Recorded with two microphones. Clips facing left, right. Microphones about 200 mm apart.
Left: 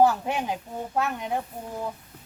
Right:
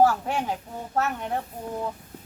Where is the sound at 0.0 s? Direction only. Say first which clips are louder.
Even; 20° left (ahead or behind).